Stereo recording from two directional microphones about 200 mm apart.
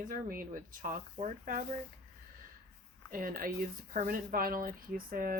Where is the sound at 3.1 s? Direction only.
45° right (ahead or behind).